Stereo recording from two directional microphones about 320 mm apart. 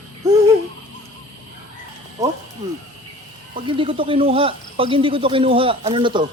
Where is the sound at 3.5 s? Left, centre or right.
Centre.